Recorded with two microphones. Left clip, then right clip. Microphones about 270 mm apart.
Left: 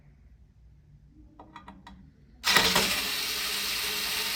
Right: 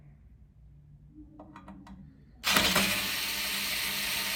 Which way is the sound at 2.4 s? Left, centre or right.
Centre.